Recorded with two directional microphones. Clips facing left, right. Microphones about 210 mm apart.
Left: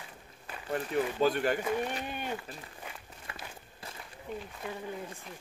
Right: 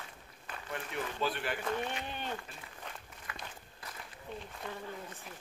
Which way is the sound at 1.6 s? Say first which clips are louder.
Left 4 dB; 10° left (ahead or behind).